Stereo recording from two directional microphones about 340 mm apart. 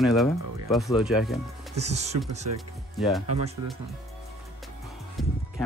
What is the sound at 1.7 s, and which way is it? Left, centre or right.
Speech, centre.